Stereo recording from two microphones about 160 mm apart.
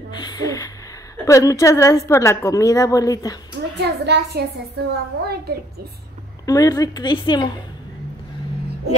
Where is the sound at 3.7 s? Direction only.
90° right.